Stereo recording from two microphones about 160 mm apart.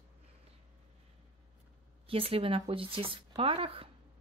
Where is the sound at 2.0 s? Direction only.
35° right (ahead or behind).